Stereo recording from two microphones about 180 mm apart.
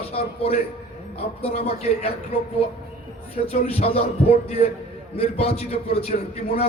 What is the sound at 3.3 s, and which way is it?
A man's voice, 35° left (ahead or behind).